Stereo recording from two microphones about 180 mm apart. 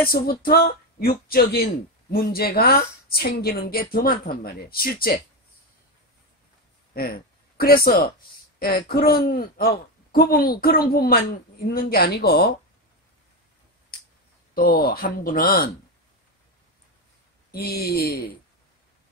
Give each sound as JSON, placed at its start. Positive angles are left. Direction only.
{"t": 0.0, "sound": "speech", "side_deg": 55}
{"t": 6.9, "sound": "speech", "side_deg": 55}
{"t": 14.5, "sound": "speech", "side_deg": 55}
{"t": 17.5, "sound": "speech", "side_deg": 60}